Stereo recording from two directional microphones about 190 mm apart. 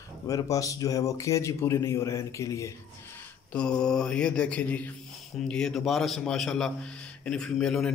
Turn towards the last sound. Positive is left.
turn(degrees=5)  # may be behind; listen again after turning